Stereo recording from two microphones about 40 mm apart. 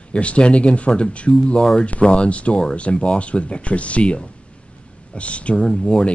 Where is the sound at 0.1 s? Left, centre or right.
Left.